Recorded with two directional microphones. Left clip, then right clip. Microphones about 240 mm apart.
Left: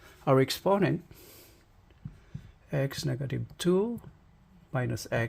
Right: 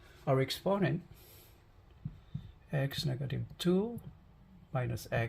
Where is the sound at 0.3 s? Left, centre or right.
Left.